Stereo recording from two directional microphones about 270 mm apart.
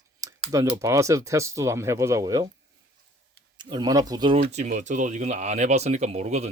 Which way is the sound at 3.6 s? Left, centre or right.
Centre.